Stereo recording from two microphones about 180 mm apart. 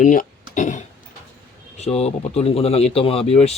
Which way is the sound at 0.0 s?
45° left (ahead or behind).